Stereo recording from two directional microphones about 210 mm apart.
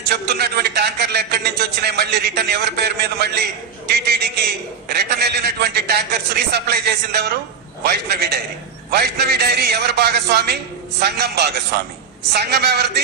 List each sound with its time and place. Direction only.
0.1 s a man's voice: 50° right (ahead or behind)